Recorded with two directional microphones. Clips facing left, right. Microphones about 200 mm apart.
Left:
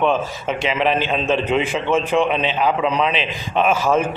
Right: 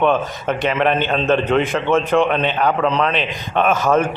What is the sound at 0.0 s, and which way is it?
A man's voice, centre (ahead or behind).